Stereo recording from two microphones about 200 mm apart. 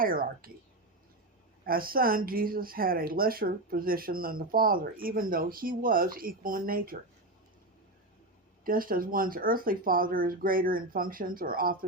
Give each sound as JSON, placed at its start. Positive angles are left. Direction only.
{"t": 0.0, "sound": "speech", "side_deg": -45}
{"t": 1.6, "sound": "speech", "side_deg": -45}
{"t": 8.6, "sound": "speech", "side_deg": -45}